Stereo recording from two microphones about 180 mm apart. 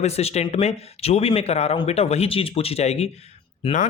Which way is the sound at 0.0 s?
35° left (ahead or behind).